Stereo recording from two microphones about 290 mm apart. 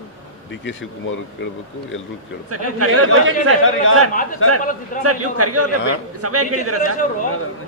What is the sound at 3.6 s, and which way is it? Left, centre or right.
Speech, left.